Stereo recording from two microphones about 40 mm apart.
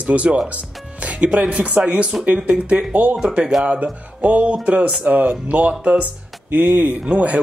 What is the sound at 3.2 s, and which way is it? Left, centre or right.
Speech, right.